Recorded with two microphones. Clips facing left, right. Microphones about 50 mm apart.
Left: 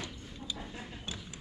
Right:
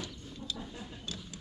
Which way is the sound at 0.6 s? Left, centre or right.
Left.